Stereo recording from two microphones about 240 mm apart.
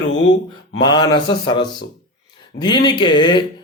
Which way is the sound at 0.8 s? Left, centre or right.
Centre.